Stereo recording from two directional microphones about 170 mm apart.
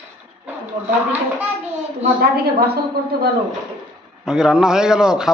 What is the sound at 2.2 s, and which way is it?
Speech, 65° right (ahead or behind).